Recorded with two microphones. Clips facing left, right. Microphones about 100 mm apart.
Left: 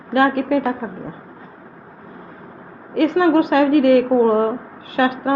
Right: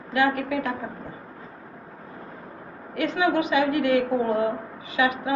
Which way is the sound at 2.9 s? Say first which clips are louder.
Left 8 dB; 60° left (ahead or behind).